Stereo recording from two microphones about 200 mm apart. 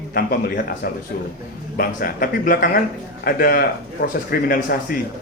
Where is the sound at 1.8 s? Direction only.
45° left (ahead or behind).